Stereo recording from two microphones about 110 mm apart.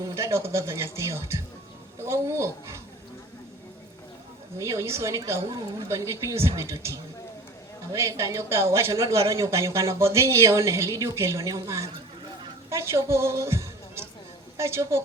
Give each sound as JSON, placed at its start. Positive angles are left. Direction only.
{"t": 0.0, "sound": "speech", "side_deg": -25}
{"t": 4.5, "sound": "a woman's voice", "side_deg": -25}